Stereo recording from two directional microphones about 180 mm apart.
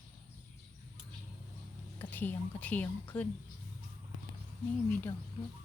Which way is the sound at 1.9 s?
10° left (ahead or behind).